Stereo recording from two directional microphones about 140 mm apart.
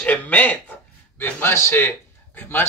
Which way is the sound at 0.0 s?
10° left (ahead or behind).